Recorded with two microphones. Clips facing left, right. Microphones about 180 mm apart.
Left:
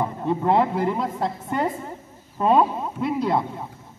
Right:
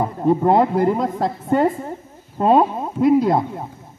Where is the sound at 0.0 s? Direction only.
40° right (ahead or behind).